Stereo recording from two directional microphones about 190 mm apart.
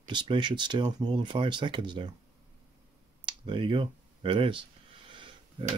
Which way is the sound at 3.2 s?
25° right (ahead or behind).